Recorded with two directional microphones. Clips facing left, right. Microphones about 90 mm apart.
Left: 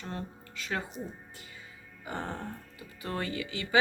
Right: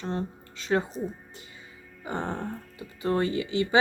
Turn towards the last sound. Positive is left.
turn(degrees=-25)  # may be behind; listen again after turning